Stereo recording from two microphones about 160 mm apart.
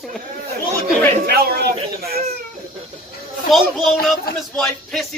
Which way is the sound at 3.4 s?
Centre (ahead or behind).